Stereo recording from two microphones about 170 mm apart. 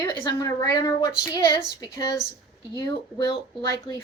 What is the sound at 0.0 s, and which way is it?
A woman's voice, 25° left (ahead or behind).